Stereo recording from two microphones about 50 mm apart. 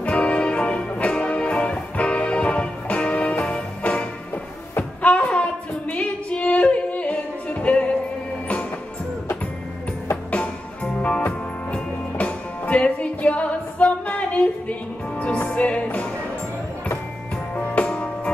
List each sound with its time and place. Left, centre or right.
0.0 s music: left
5.0 s female singing: left
10.3 s music: left
17.7 s music: left